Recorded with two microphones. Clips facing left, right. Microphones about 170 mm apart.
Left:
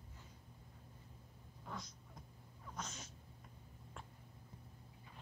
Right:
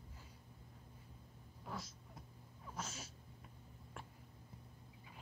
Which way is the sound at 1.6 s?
5° right (ahead or behind).